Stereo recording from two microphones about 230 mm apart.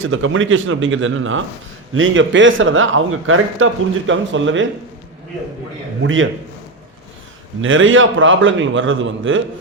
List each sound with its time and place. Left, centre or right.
0.0 s speech: right
6.0 s a man's voice: right
7.6 s speech: right